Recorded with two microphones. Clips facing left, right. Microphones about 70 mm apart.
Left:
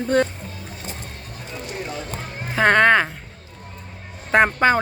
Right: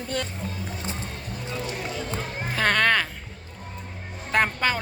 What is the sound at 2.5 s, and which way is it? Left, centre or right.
Speech, left.